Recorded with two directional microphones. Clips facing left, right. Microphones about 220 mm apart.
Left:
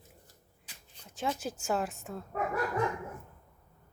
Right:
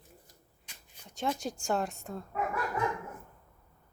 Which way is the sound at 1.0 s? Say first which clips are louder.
Right 1 dB; 5° left (ahead or behind).